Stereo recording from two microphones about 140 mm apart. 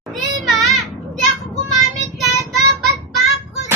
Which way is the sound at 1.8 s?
Centre (ahead or behind).